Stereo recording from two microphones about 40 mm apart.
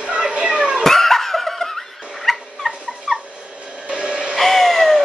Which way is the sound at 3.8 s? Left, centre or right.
Right.